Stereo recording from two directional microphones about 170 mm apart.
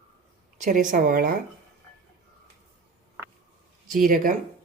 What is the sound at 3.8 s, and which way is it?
Speech, 55° right (ahead or behind).